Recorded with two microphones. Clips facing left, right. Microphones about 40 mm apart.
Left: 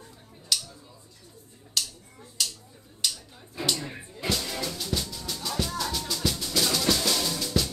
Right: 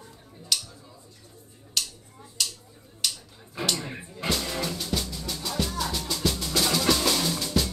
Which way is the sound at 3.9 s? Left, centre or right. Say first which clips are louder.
Right 1 dB; centre.